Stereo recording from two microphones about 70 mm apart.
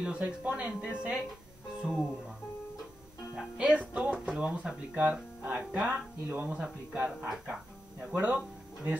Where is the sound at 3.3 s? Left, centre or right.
Centre.